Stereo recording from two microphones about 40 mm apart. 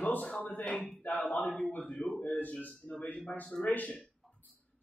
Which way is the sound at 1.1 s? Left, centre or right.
Left.